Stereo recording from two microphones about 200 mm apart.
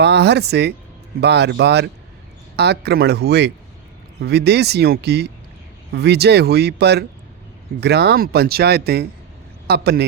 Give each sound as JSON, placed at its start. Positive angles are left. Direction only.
{"t": 0.0, "sound": "speech", "side_deg": -55}